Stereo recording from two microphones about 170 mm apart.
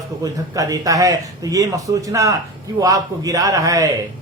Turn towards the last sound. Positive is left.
turn(degrees=-20)  # may be behind; listen again after turning